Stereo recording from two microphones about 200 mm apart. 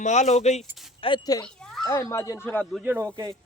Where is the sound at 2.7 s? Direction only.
10° right (ahead or behind).